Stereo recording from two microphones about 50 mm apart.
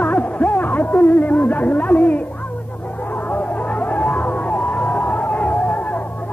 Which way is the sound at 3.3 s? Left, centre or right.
Left.